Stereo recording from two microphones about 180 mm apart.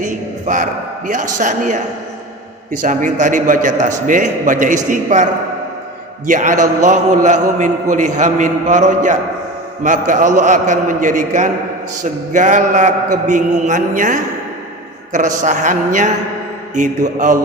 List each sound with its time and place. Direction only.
0.0 s a man's voice: 45° right (ahead or behind)
2.8 s a man's voice: 45° right (ahead or behind)